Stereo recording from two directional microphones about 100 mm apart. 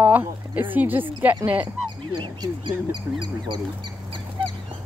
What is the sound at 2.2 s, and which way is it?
Speech, 45° right (ahead or behind).